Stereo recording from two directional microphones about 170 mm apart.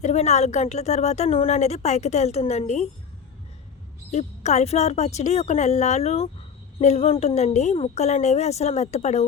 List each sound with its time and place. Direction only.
0.0 s a woman's voice: 40° left (ahead or behind)
4.1 s a woman's voice: 40° left (ahead or behind)